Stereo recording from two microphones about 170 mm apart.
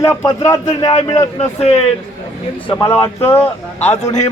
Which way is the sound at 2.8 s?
15° left (ahead or behind).